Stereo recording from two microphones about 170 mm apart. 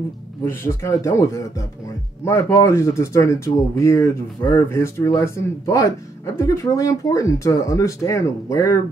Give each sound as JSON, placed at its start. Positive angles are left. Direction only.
{"t": 0.5, "sound": "speech", "side_deg": 15}
{"t": 2.5, "sound": "speech", "side_deg": 15}